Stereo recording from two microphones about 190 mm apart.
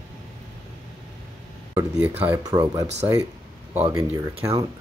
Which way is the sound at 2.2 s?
20° right (ahead or behind).